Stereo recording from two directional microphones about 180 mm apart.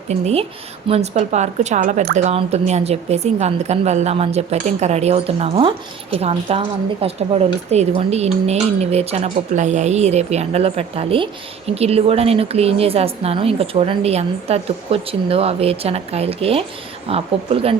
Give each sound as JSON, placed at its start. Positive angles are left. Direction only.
{"t": 0.1, "sound": "speech", "side_deg": -35}